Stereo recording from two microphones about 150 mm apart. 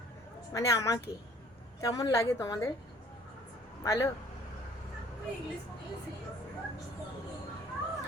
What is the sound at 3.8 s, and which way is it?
Speech, 20° left (ahead or behind).